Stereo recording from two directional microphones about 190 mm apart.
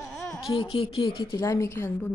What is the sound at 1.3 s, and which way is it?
Speech, 15° left (ahead or behind).